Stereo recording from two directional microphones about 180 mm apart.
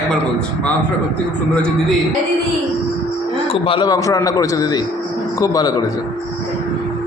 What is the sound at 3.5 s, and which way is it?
A man's voice, 30° left (ahead or behind).